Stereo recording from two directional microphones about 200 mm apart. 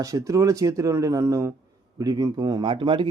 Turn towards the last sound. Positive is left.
turn(degrees=-25)  # may be behind; listen again after turning